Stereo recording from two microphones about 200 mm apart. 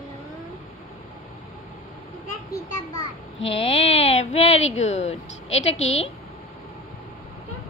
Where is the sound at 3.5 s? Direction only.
30° left (ahead or behind).